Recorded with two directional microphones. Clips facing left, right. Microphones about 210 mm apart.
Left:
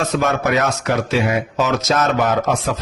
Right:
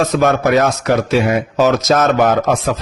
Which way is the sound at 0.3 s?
35° right (ahead or behind).